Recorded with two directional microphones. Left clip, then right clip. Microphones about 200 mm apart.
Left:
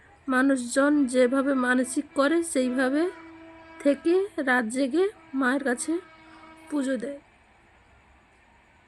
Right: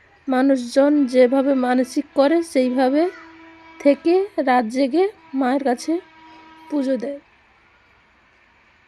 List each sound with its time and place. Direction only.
0.3 s speech: 15° right (ahead or behind)